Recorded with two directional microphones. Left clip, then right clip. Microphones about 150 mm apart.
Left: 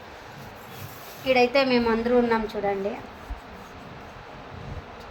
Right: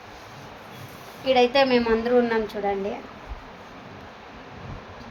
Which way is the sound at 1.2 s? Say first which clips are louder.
Right 2 dB; 5° right (ahead or behind).